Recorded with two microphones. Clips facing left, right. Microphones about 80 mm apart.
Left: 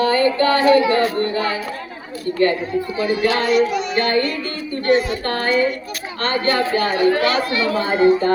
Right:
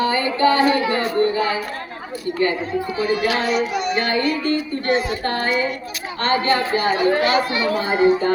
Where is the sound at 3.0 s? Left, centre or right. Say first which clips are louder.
Left 2 dB; centre.